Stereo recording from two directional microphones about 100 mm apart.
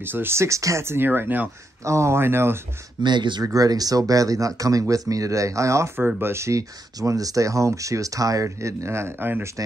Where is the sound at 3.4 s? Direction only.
35° right (ahead or behind).